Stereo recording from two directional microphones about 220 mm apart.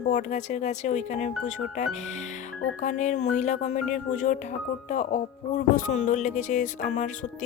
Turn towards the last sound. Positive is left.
turn(degrees=35)  # may be behind; listen again after turning